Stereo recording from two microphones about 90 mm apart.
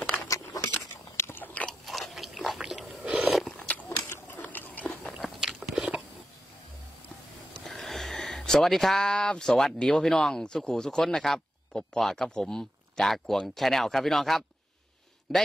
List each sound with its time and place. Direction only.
0.3 s a sound: 35° left (ahead or behind)
1.1 s biting: 25° left (ahead or behind)
1.9 s scrape: centre (ahead or behind)
3.4 s biting: 15° left (ahead or behind)
5.1 s biting: 5° right (ahead or behind)
7.5 s a man's voice: centre (ahead or behind)